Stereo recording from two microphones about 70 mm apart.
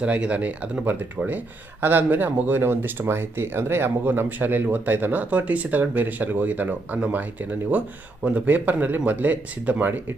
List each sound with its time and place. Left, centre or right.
0.0 s speech: centre